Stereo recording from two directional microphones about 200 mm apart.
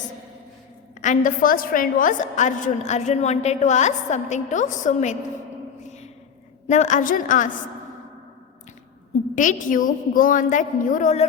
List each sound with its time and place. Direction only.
1.0 s a woman's voice: 40° left (ahead or behind)
6.7 s a woman's voice: 35° left (ahead or behind)
9.3 s a woman's voice: 40° left (ahead or behind)